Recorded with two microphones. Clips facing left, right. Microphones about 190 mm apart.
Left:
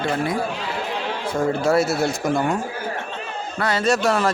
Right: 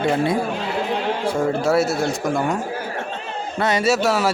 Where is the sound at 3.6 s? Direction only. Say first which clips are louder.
Right 3 dB; 20° right (ahead or behind).